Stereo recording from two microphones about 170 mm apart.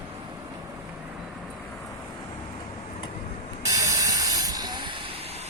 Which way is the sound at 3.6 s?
20° right (ahead or behind).